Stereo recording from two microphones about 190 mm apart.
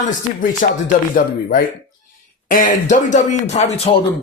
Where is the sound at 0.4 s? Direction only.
45° left (ahead or behind).